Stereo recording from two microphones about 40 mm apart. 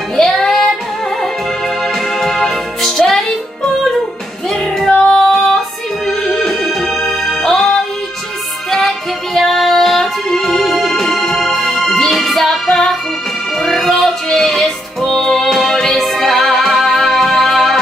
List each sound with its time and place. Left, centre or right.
0.1 s child singing: centre
2.1 s music: centre
5.1 s music: centre
6.0 s music: centre